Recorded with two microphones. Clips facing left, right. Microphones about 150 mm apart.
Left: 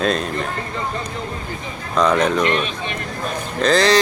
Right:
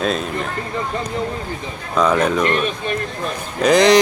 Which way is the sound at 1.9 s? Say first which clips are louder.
Even; 5° right (ahead or behind).